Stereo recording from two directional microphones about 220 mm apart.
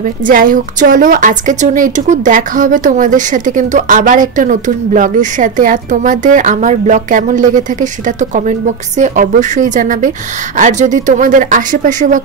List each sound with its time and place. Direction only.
0.3 s a woman's voice: 40° right (ahead or behind)